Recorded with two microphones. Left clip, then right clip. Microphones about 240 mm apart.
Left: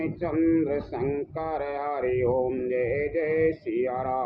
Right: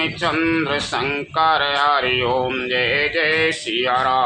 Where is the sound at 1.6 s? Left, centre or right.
Right.